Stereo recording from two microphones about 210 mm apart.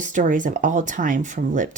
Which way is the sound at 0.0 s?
40° right (ahead or behind).